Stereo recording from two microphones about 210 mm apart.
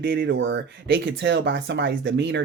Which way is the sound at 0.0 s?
50° right (ahead or behind).